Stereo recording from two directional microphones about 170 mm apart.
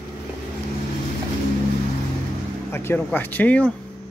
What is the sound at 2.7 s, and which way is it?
Speech, 10° left (ahead or behind).